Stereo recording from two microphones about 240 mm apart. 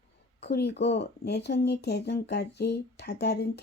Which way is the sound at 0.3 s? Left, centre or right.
Left.